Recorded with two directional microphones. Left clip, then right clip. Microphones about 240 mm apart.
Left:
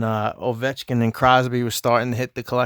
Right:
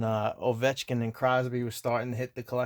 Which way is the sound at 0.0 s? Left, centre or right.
Left.